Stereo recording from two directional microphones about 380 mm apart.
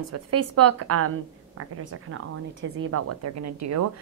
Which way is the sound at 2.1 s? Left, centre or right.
Right.